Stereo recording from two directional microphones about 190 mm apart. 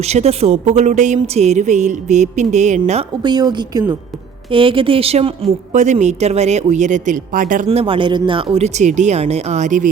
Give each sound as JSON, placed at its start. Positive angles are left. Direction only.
{"t": 0.1, "sound": "speech", "side_deg": -35}
{"t": 3.2, "sound": "speech", "side_deg": -20}